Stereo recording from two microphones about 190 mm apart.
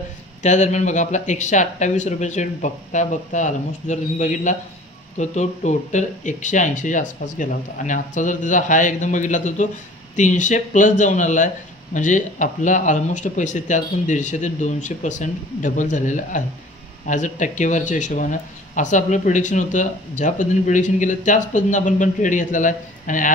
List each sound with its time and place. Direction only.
0.4 s speech: 40° left (ahead or behind)